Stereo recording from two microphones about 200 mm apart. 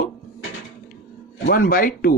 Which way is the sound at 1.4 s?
45° left (ahead or behind).